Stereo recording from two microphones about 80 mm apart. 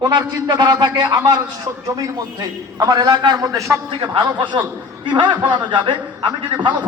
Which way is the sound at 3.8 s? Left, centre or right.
Right.